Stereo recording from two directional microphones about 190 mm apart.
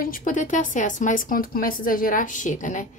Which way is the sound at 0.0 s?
45° left (ahead or behind).